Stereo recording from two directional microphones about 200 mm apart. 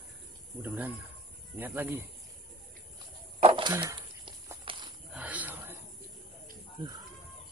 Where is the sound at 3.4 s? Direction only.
25° right (ahead or behind).